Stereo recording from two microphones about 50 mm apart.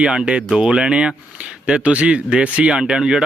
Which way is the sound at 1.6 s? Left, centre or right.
Right.